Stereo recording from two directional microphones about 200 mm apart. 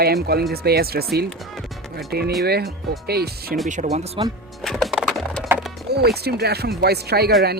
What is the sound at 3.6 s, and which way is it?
Speech, 40° right (ahead or behind).